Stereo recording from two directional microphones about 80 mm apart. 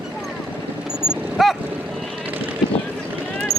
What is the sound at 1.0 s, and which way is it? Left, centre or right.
Vehicle, centre.